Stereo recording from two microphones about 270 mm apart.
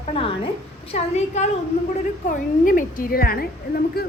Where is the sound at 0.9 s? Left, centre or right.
Left.